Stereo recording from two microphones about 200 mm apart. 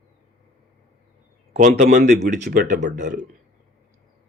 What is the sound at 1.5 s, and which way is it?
Speech, 35° right (ahead or behind).